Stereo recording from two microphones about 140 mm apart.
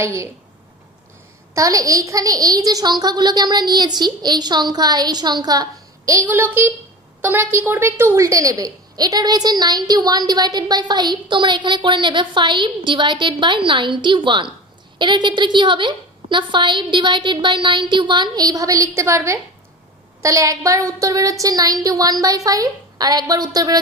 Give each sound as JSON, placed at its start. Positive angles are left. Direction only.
{"t": 0.0, "sound": "a woman's voice", "side_deg": -20}
{"t": 1.5, "sound": "a woman's voice", "side_deg": -25}